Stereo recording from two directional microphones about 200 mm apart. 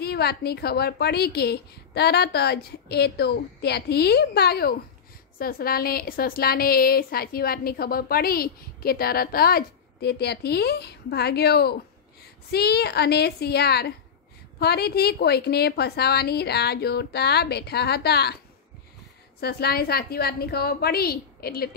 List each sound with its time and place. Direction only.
0.0 s a woman's voice: 50° left (ahead or behind)
19.4 s a woman's voice: 50° left (ahead or behind)